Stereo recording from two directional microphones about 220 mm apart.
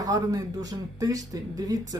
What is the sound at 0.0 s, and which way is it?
Speech, 15° right (ahead or behind).